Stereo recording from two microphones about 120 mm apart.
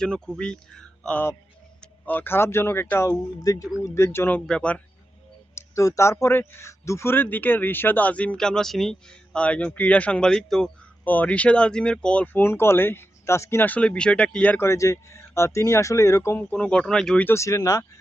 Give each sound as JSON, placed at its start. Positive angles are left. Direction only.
{"t": 0.0, "sound": "speech", "side_deg": 5}
{"t": 5.5, "sound": "speech", "side_deg": 25}
{"t": 17.2, "sound": "speech", "side_deg": 25}